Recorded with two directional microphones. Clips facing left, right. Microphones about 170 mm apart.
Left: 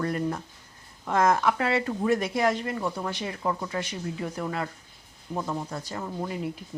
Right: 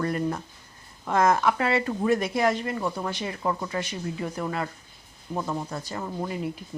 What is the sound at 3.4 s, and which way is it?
Speech, 25° right (ahead or behind).